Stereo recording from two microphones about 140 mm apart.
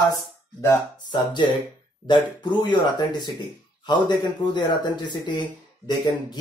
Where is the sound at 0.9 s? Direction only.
35° left (ahead or behind).